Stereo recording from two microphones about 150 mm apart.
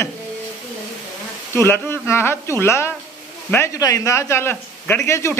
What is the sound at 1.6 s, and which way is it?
Speech, 15° left (ahead or behind).